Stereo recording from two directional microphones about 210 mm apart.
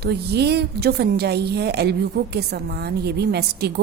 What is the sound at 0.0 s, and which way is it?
A woman's voice, 50° right (ahead or behind).